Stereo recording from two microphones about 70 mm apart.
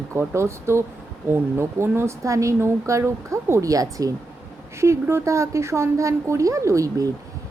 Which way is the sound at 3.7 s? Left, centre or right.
Right.